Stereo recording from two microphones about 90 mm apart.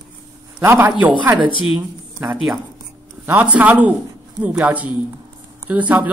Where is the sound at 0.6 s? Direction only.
30° right (ahead or behind).